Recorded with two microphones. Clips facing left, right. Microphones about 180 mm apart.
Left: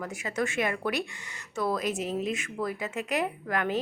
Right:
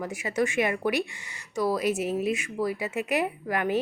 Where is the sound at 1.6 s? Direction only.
5° right (ahead or behind).